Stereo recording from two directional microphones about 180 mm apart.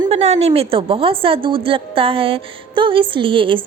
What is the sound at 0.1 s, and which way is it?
A woman's voice, 35° right (ahead or behind).